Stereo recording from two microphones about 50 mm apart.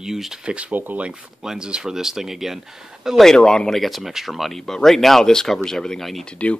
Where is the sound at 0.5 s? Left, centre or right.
Right.